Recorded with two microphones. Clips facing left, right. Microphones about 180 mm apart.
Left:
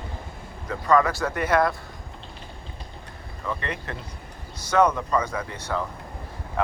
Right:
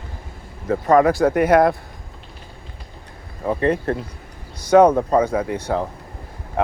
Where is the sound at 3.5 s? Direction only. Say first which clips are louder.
Right 12 dB; 50° right (ahead or behind).